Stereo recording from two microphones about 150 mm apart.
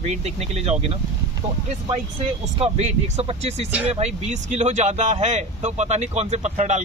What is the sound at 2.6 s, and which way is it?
Speech, 45° right (ahead or behind).